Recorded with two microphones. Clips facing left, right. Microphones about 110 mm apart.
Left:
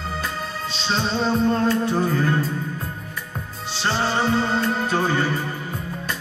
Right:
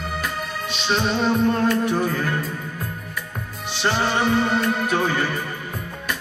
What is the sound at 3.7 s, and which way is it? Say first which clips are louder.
Music: right 1 dB; 30° left (ahead or behind).